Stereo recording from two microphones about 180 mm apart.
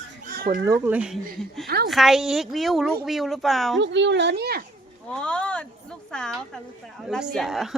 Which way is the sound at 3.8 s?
80° right.